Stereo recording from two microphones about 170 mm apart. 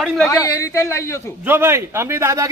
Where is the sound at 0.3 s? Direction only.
20° left (ahead or behind).